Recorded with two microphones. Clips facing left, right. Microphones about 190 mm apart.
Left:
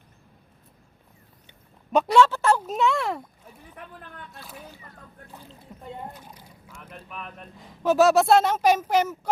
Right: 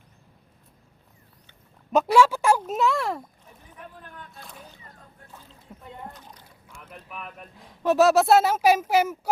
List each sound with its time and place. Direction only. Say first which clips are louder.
1.9 s speech: even; 5° right (ahead or behind)
3.8 s a sound: even; 65° left (ahead or behind)
6.0 s boat: left 2 dB; 10° left (ahead or behind)
6.7 s speech: left 1 dB; 5° right (ahead or behind)